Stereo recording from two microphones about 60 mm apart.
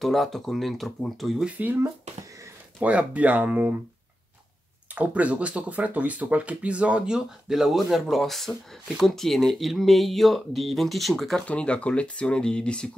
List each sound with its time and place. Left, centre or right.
0.0 s speech: centre
2.8 s speech: right
4.9 s speech: right; by 11.4 s centre
11.4 s speech: centre